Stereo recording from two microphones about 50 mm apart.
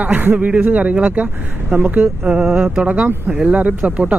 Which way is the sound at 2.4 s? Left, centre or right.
Centre.